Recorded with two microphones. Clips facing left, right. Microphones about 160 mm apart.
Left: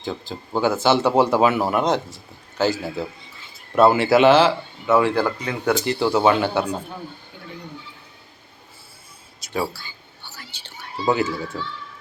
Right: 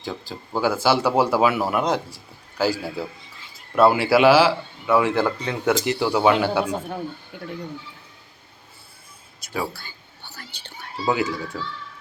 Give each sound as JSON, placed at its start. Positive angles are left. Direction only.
{"t": 0.0, "sound": "a man's voice", "side_deg": -10}
{"t": 3.8, "sound": "speech", "side_deg": -5}
{"t": 6.0, "sound": "speech", "side_deg": -5}
{"t": 9.7, "sound": "whispering", "side_deg": -55}
{"t": 11.0, "sound": "speech", "side_deg": -10}